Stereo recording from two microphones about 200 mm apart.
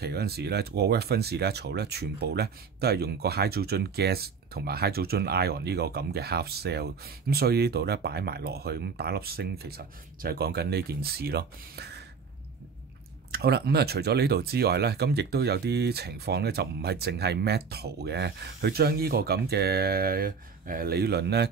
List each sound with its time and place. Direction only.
0.0 s speech: 50° right (ahead or behind)
13.3 s speech: 55° right (ahead or behind)